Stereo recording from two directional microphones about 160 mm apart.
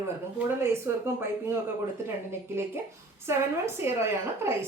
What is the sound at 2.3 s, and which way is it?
A woman's voice, 15° right (ahead or behind).